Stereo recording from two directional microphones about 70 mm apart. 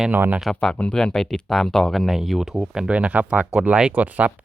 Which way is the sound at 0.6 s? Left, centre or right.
Centre.